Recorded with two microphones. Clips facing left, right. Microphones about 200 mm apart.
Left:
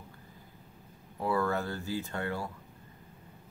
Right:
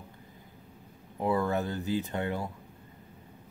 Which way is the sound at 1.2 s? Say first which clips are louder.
Right 2 dB; 20° right (ahead or behind).